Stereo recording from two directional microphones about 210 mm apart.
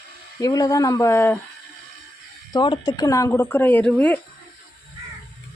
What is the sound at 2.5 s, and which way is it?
Speech, 20° left (ahead or behind).